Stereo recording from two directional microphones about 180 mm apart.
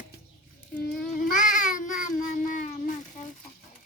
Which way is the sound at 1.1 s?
45° left (ahead or behind).